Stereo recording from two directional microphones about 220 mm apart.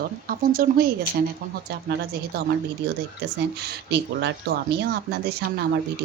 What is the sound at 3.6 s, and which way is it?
Speech, 50° right (ahead or behind).